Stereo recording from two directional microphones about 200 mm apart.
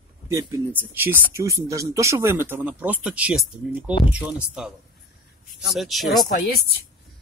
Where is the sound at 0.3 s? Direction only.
15° right (ahead or behind).